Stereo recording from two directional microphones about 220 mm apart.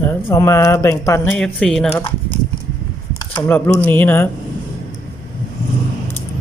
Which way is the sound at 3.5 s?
5° left (ahead or behind).